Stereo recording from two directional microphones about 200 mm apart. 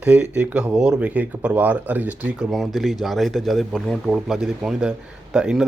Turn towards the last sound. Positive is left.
turn(degrees=-5)  # may be behind; listen again after turning